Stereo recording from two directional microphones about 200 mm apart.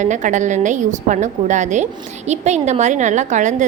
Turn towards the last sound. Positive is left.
turn(degrees=-35)  # may be behind; listen again after turning